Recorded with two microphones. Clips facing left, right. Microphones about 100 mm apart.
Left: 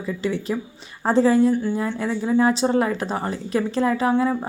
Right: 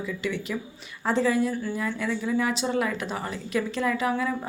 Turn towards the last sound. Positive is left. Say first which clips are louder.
# left 6 dB
turn(degrees=30)  # may be behind; listen again after turning